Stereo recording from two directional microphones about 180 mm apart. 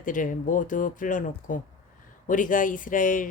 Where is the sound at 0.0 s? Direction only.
45° left (ahead or behind).